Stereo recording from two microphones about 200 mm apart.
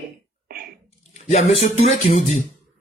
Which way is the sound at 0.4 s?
50° right (ahead or behind).